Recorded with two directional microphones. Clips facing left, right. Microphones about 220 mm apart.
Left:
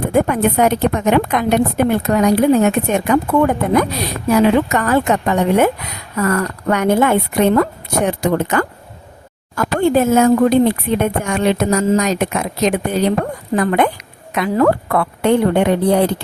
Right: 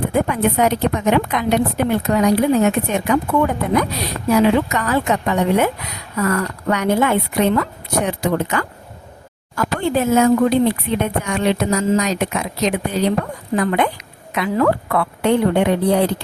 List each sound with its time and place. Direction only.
0.1 s speech: 50° left (ahead or behind)